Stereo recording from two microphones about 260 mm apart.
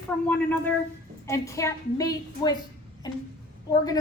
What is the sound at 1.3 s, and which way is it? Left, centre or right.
A woman's voice, centre.